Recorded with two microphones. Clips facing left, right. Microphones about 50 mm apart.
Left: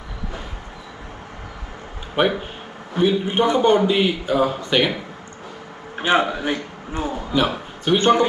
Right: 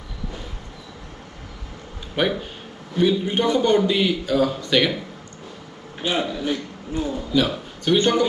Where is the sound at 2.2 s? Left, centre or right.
Left.